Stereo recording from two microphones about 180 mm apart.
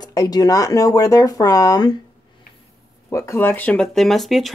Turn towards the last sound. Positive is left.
turn(degrees=0)  # may be behind; listen again after turning